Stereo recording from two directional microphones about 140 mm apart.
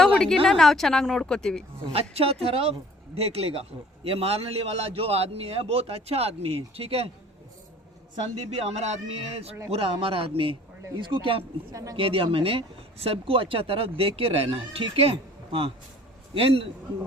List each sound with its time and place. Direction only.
0.0 s a sound: 5° left (ahead or behind)
0.4 s speech: 5° left (ahead or behind)
1.8 s a man's voice: 45° right (ahead or behind)
8.4 s a man's voice: 50° right (ahead or behind)
11.7 s speech: 25° right (ahead or behind)
11.9 s a man's voice: 40° right (ahead or behind)